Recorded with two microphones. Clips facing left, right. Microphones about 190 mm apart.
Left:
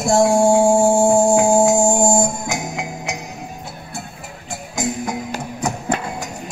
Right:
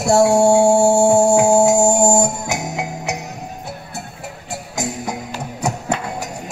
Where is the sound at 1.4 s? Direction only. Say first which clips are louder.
Right 1 dB; 40° right (ahead or behind).